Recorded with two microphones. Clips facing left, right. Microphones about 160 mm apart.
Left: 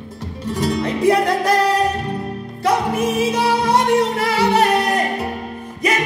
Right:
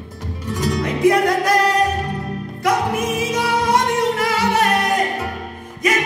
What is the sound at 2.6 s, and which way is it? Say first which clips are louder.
Music: left 1 dB; 30° left (ahead or behind).